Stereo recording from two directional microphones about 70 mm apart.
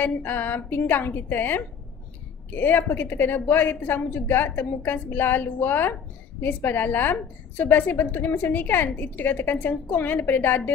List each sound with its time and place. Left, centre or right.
0.0 s a woman's voice: left